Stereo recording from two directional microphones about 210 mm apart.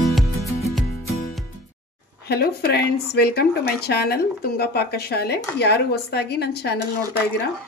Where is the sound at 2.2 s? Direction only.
50° left (ahead or behind).